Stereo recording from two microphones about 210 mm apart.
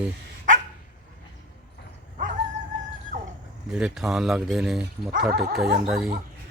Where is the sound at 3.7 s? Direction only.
5° right (ahead or behind).